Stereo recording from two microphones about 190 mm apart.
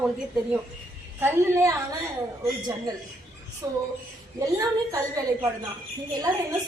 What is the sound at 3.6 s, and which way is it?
A woman's voice, 20° right (ahead or behind).